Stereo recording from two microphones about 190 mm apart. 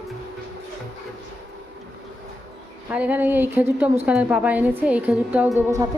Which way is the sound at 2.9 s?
5° right (ahead or behind).